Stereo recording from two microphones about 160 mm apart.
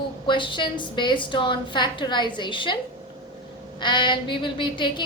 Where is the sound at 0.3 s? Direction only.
30° left (ahead or behind).